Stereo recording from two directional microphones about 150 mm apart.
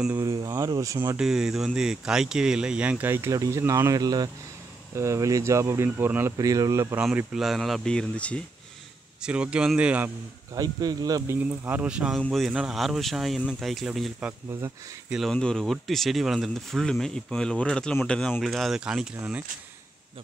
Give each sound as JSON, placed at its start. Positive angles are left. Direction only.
{"t": 0.2, "sound": "speech", "side_deg": -25}
{"t": 1.1, "sound": "speech", "side_deg": -5}
{"t": 7.0, "sound": "speech", "side_deg": -5}
{"t": 9.2, "sound": "speech", "side_deg": -5}
{"t": 10.5, "sound": "speech", "side_deg": -25}
{"t": 11.3, "sound": "speech", "side_deg": -10}
{"t": 14.5, "sound": "speech", "side_deg": -20}
{"t": 15.0, "sound": "speech", "side_deg": 0}